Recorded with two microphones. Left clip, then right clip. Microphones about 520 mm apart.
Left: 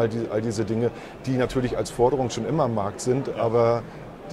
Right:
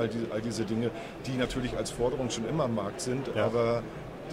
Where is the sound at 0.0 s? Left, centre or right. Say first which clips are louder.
Left 7 dB; left.